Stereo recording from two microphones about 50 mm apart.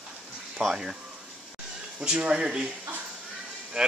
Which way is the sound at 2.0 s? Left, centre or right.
Centre.